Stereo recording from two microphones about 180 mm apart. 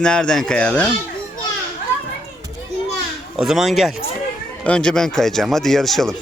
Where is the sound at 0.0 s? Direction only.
5° left (ahead or behind).